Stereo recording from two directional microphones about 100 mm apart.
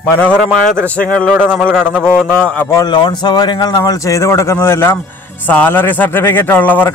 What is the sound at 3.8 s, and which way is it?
A man's voice, 30° left (ahead or behind).